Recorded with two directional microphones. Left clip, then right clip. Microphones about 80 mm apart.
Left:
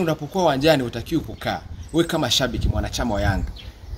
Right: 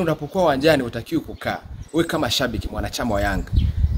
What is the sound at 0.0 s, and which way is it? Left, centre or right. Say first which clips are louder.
Speech: right 1 dB; right.